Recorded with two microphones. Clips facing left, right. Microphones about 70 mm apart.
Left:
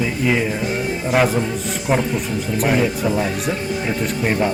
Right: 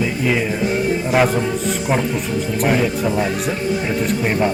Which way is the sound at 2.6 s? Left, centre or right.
Centre.